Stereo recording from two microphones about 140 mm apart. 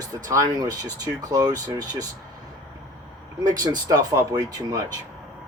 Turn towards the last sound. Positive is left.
turn(degrees=-25)  # may be behind; listen again after turning